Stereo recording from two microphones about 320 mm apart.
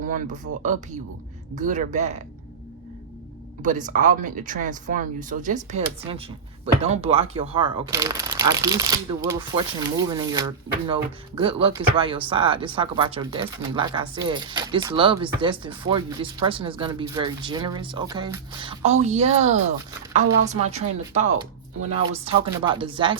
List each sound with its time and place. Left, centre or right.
0.0 s speech: right
3.6 s speech: right